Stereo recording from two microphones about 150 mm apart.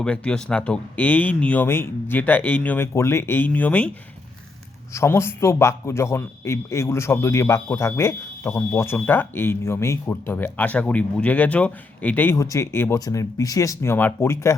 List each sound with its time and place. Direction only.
0.0 s a man's voice: 5° left (ahead or behind)
4.9 s a man's voice: 15° left (ahead or behind)